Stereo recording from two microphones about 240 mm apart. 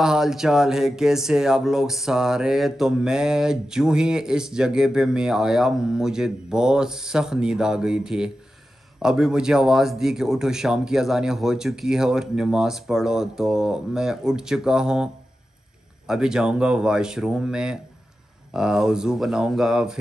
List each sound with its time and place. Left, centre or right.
0.0 s speech: centre
16.1 s speech: centre